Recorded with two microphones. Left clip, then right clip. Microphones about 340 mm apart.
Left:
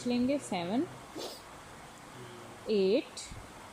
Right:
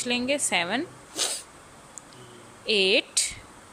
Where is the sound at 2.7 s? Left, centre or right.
Right.